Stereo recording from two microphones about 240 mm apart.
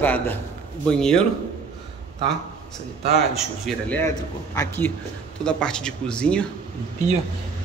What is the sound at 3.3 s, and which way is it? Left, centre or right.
A man's voice, centre.